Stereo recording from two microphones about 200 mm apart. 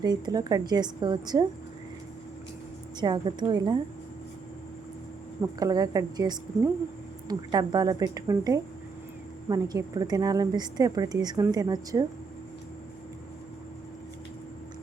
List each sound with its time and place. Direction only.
0.0 s a woman's voice: 20° right (ahead or behind)
3.0 s a woman's voice: 20° right (ahead or behind)
5.5 s a woman's voice: 20° right (ahead or behind)